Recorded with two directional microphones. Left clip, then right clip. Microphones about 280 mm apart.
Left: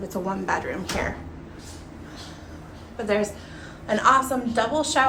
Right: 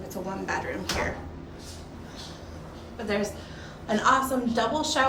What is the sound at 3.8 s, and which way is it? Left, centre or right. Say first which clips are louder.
A woman's voice: left 4 dB; centre.